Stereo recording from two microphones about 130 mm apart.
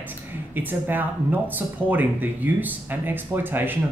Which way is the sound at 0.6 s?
15° right (ahead or behind).